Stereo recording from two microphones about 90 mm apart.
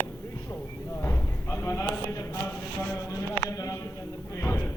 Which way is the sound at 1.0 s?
30° left (ahead or behind).